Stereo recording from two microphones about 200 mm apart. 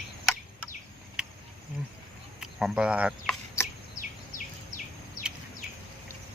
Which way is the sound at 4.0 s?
40° left (ahead or behind).